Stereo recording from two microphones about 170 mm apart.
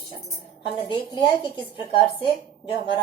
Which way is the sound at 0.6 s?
25° left (ahead or behind).